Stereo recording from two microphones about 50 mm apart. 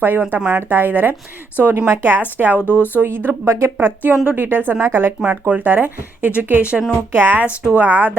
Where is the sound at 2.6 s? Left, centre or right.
Left.